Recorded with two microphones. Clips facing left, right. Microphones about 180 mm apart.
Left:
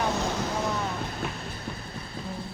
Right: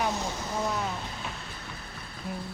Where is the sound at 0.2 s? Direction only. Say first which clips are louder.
Left 5 dB; 70° left (ahead or behind).